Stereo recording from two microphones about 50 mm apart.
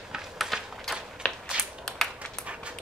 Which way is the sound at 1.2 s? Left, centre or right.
Centre.